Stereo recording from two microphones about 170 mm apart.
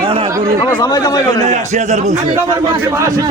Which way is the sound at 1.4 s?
45° right (ahead or behind).